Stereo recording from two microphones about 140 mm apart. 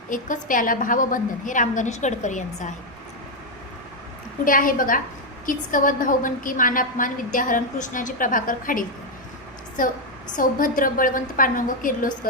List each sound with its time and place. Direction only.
0.1 s a woman's voice: 75° left (ahead or behind)
4.4 s a woman's voice: 75° left (ahead or behind)